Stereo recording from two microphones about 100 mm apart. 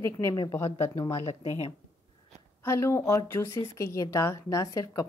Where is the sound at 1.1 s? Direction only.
80° left.